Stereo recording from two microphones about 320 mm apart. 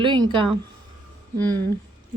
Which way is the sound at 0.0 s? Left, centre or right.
Centre.